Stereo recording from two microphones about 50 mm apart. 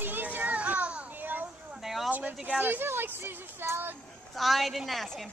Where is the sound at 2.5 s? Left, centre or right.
Right.